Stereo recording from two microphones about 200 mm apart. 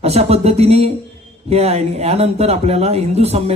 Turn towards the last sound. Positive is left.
turn(degrees=-30)  # may be behind; listen again after turning